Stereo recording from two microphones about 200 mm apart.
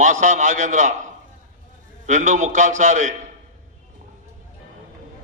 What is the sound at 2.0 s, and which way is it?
A man's voice, 40° right (ahead or behind).